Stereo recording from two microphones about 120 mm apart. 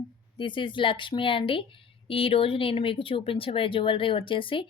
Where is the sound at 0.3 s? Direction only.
45° left (ahead or behind).